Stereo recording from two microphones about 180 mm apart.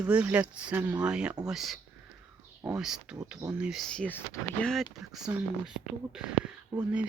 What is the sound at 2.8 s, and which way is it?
Speech, 5° right (ahead or behind).